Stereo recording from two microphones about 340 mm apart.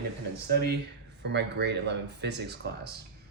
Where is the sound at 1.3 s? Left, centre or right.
Right.